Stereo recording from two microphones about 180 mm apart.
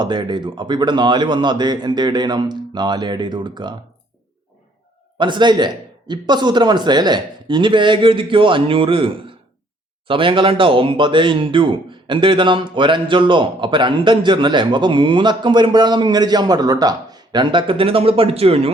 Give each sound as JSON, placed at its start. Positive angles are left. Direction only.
{"t": 0.0, "sound": "speech", "side_deg": -25}
{"t": 5.1, "sound": "speech", "side_deg": -25}